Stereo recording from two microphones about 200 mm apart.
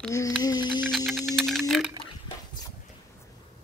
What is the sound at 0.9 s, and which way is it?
Typing, centre (ahead or behind).